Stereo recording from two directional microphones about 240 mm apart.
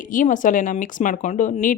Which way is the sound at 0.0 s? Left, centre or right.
Left.